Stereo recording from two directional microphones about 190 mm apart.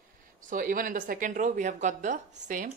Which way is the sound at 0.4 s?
45° right (ahead or behind).